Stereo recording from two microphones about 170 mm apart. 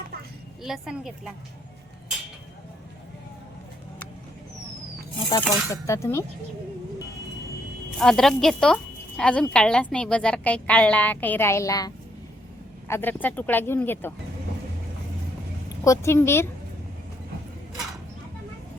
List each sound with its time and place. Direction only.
0.6 s speech: centre (ahead or behind)
5.3 s speech: 15° left (ahead or behind)
7.9 s speech: centre (ahead or behind); by 11.9 s 20° left (ahead or behind)
12.9 s speech: 10° left (ahead or behind)
15.8 s speech: 15° left (ahead or behind)